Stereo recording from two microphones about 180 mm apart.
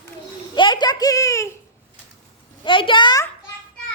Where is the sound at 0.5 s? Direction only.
25° left (ahead or behind).